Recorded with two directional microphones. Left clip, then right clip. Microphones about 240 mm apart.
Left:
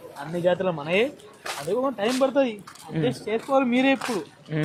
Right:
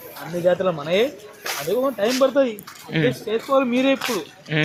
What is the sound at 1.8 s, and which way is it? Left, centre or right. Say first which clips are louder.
Speech: right 5 dB; centre.